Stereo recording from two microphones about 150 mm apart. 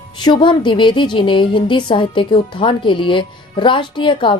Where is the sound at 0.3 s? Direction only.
30° left (ahead or behind).